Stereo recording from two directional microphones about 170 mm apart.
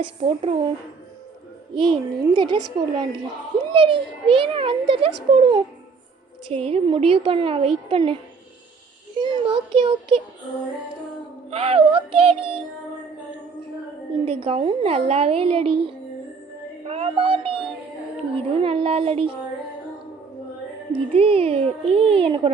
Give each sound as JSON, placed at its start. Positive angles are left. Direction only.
{"t": 0.2, "sound": "a child's voice", "side_deg": -35}
{"t": 1.7, "sound": "a child's voice", "side_deg": -30}
{"t": 9.2, "sound": "a child's voice", "side_deg": -30}
{"t": 11.5, "sound": "a child's voice", "side_deg": -35}
{"t": 14.3, "sound": "a child's voice", "side_deg": -30}
{"t": 16.8, "sound": "child singing", "side_deg": -35}
{"t": 18.3, "sound": "a child's voice", "side_deg": -35}
{"t": 20.9, "sound": "a child's voice", "side_deg": -35}